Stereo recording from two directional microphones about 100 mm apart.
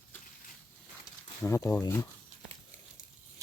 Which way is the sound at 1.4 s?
25° left (ahead or behind).